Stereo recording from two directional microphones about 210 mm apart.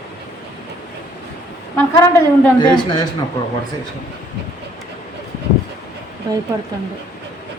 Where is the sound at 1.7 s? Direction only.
10° left (ahead or behind).